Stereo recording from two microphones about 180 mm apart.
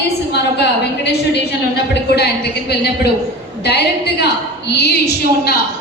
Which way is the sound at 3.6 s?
65° left (ahead or behind).